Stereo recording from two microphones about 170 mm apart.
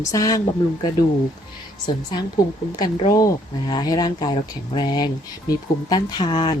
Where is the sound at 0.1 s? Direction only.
20° left (ahead or behind).